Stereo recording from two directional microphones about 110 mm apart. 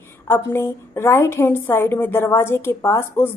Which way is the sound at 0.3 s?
20° left (ahead or behind).